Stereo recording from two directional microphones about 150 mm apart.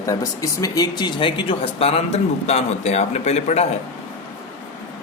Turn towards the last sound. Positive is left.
turn(degrees=45)  # may be behind; listen again after turning